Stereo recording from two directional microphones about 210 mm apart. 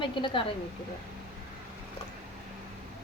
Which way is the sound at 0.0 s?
25° left (ahead or behind).